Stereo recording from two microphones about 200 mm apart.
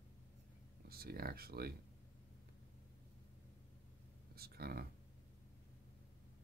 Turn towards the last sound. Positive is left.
turn(degrees=-50)  # may be behind; listen again after turning